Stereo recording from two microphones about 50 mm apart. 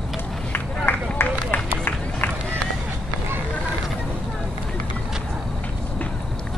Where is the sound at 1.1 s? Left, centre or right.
Left.